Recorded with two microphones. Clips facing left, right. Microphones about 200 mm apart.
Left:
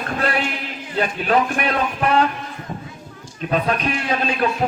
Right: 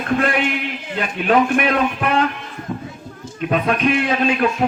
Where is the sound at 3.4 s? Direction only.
35° left (ahead or behind).